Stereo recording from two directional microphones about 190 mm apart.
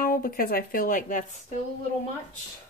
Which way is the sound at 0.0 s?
50° left (ahead or behind).